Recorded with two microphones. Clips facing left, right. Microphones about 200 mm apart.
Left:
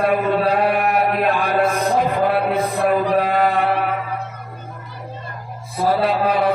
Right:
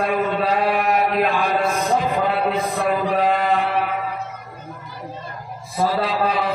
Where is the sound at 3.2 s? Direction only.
55° left (ahead or behind).